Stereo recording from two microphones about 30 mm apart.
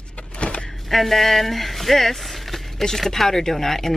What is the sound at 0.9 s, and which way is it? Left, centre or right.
Speech, centre.